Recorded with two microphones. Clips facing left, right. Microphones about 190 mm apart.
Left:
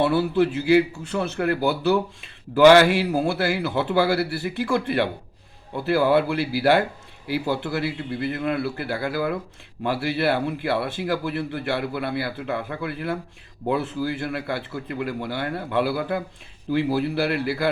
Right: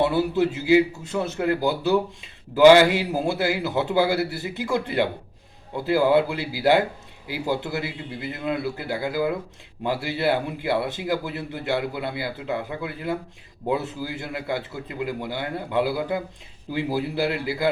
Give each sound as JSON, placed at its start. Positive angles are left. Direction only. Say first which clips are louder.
{"t": 0.0, "sound": "a man's voice", "louder": "left 1 dB", "side_deg": -20}